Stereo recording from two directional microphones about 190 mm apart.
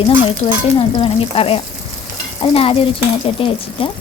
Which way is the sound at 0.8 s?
30° left (ahead or behind).